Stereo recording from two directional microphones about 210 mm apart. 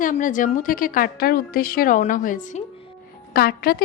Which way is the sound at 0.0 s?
40° left (ahead or behind).